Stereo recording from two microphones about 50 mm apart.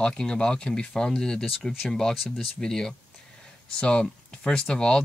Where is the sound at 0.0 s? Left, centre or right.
Centre.